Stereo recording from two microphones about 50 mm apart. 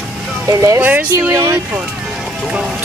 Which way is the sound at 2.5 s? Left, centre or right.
Centre.